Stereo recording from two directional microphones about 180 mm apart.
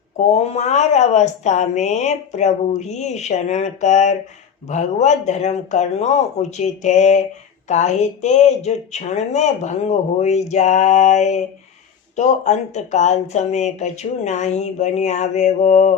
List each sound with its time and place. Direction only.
0.3 s speech: 40° left (ahead or behind)